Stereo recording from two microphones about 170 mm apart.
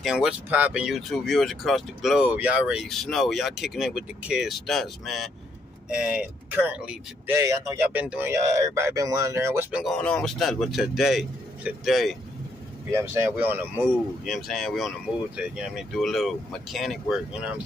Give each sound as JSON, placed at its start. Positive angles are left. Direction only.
{"t": 0.0, "sound": "speech", "side_deg": -5}
{"t": 7.3, "sound": "speech", "side_deg": -20}
{"t": 9.9, "sound": "speech", "side_deg": 5}
{"t": 12.9, "sound": "speech", "side_deg": -15}
{"t": 14.2, "sound": "speech", "side_deg": 0}